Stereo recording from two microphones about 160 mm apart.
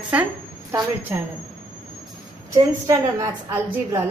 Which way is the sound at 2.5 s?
20° right (ahead or behind).